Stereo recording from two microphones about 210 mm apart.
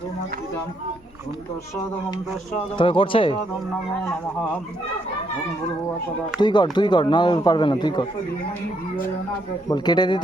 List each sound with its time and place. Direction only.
2.7 s speech: 25° left (ahead or behind)
6.4 s speech: 20° left (ahead or behind)
9.6 s speech: 20° left (ahead or behind)